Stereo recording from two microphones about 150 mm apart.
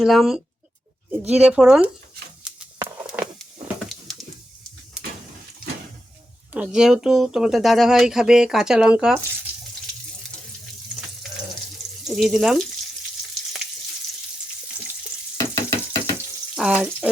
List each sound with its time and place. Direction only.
0.0 s speech: centre (ahead or behind)
2.4 s a sound: 5° right (ahead or behind)
6.5 s speech: 5° right (ahead or behind)
12.0 s speech: centre (ahead or behind)
15.4 s knock: 20° left (ahead or behind)
16.6 s speech: 5° right (ahead or behind)